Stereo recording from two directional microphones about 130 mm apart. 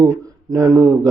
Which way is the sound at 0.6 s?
25° right (ahead or behind).